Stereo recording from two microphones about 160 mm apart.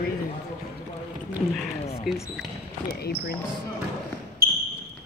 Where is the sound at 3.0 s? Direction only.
85° left.